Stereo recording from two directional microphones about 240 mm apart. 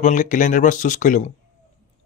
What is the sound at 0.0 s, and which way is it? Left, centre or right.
Speech, left.